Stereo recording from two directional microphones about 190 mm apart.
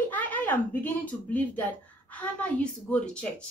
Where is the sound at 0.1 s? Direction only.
10° left (ahead or behind).